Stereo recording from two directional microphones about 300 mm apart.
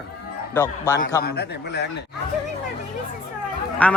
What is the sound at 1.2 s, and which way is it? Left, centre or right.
Speech, left.